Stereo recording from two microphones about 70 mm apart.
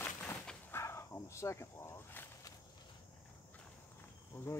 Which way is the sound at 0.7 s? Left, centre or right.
Left.